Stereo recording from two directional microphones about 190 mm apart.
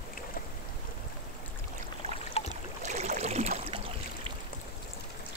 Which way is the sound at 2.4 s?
30° left (ahead or behind).